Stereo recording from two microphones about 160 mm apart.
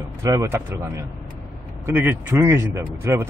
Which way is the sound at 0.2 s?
20° right (ahead or behind).